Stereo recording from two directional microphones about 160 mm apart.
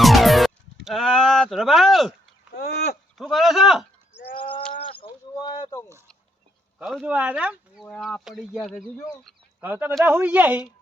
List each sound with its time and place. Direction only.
0.0 s music: centre (ahead or behind)
2.6 s speech: 90° left
3.2 s speech: centre (ahead or behind)
6.7 s speech: 5° right (ahead or behind)
9.6 s speech: 10° right (ahead or behind)